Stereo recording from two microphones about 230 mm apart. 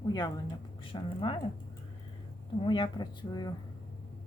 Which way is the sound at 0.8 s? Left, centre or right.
Left.